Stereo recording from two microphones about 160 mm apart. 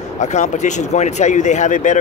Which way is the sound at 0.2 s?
45° left (ahead or behind).